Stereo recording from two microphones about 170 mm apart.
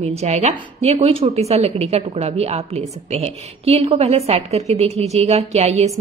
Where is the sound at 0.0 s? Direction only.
40° right (ahead or behind).